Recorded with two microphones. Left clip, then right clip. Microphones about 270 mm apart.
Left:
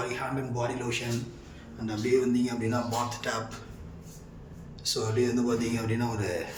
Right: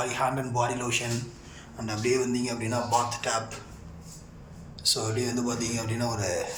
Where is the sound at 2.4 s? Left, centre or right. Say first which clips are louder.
Right 1 dB; centre.